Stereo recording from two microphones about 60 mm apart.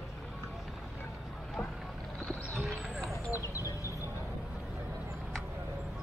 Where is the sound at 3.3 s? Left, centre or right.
Left.